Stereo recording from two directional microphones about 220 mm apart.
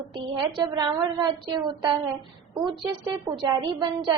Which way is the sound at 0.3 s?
20° right (ahead or behind).